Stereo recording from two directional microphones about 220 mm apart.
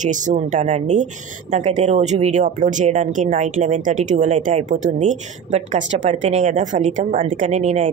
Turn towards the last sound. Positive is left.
turn(degrees=-30)  # may be behind; listen again after turning